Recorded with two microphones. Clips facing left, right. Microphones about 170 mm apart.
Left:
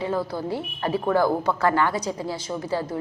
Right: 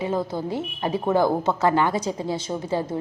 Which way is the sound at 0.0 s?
20° right (ahead or behind).